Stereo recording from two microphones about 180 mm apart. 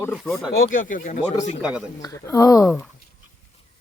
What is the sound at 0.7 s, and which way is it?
Speech, 45° left (ahead or behind).